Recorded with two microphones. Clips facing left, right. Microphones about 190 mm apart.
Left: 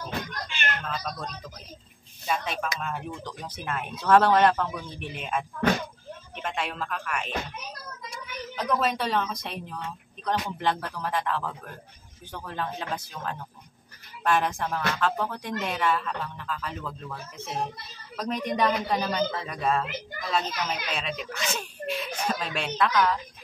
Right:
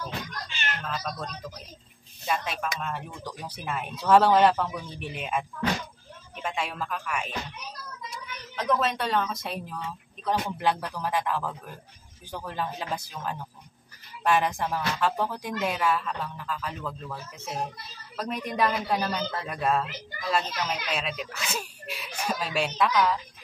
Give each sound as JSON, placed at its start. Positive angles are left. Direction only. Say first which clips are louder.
{"t": 0.5, "sound": "music", "louder": "left 3 dB", "side_deg": 55}
{"t": 0.8, "sound": "speech", "louder": "even", "side_deg": 0}
{"t": 3.3, "sound": "speech", "louder": "even", "side_deg": -10}
{"t": 6.4, "sound": "speech", "louder": "even", "side_deg": -5}
{"t": 8.5, "sound": "speech", "louder": "even", "side_deg": 0}